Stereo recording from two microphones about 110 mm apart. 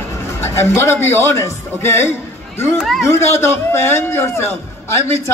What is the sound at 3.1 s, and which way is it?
A man's voice, 25° left (ahead or behind).